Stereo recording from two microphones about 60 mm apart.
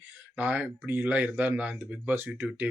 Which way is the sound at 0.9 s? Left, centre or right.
Right.